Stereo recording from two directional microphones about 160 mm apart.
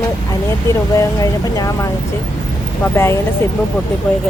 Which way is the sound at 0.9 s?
20° left (ahead or behind).